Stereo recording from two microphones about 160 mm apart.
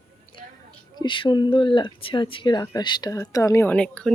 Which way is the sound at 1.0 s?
30° left (ahead or behind).